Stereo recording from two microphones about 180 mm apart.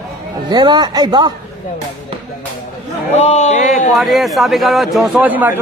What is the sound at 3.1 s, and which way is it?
Speech, 40° left (ahead or behind).